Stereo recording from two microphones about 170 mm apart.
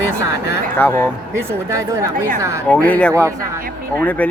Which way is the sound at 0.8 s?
10° left (ahead or behind).